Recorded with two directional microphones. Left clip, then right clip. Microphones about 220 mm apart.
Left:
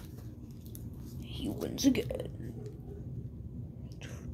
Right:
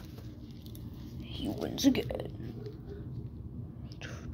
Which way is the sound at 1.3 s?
5° left (ahead or behind).